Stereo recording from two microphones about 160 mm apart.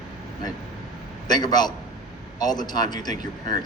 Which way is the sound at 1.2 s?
25° left (ahead or behind).